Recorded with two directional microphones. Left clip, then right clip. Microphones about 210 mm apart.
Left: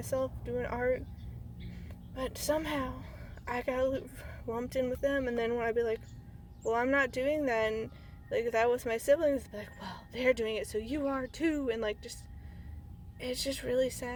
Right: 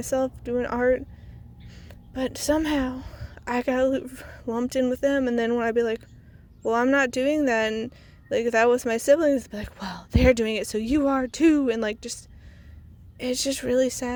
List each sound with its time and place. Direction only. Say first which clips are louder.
0.0 s speech: right 8 dB; 45° right (ahead or behind)
13.1 s speech: right 9 dB; 45° right (ahead or behind)